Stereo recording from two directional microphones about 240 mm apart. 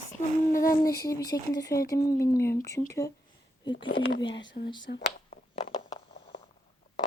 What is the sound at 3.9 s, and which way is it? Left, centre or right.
Speech, left.